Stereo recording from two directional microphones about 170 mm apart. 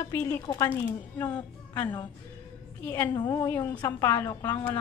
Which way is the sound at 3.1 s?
25° left (ahead or behind).